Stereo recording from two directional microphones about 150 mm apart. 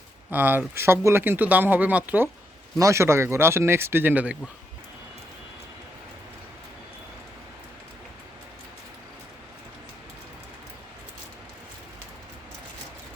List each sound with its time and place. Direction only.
0.3 s speech: 10° right (ahead or behind)